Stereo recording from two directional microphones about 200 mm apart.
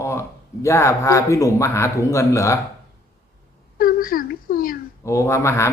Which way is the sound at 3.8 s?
45° left (ahead or behind).